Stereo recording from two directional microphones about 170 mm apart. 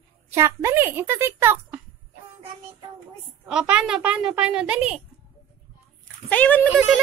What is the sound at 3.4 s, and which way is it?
Speech, 5° right (ahead or behind).